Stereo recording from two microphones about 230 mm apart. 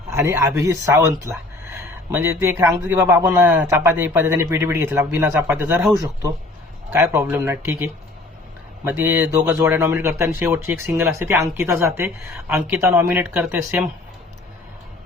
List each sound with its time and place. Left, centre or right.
0.1 s speech: centre
8.8 s speech: centre